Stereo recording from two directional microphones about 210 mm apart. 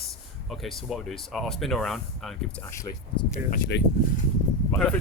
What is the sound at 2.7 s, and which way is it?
Speech, 15° left (ahead or behind).